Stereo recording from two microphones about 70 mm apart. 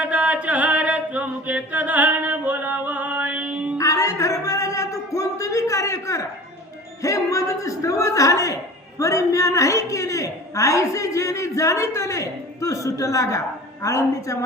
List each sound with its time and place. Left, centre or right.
0.0 s chant: centre
3.8 s music: left
7.0 s a man's voice: left